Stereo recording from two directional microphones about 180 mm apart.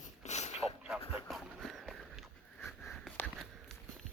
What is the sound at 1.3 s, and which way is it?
Horse, centre (ahead or behind).